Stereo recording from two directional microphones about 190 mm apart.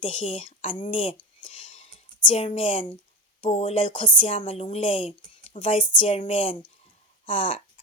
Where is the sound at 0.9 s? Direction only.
25° left (ahead or behind).